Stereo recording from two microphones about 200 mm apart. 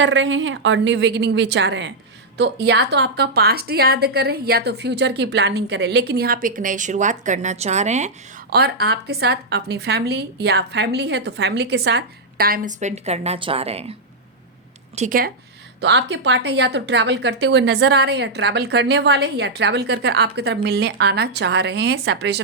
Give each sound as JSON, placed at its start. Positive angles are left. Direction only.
{"t": 0.0, "sound": "a woman's voice", "side_deg": -70}
{"t": 8.4, "sound": "speech", "side_deg": -55}
{"t": 14.9, "sound": "speech", "side_deg": -40}
{"t": 15.8, "sound": "speech", "side_deg": -65}